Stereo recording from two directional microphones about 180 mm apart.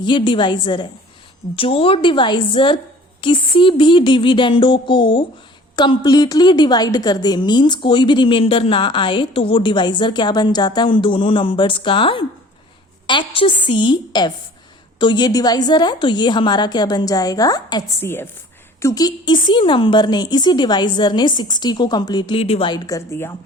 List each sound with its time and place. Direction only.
0.0 s a woman's voice: 25° left (ahead or behind)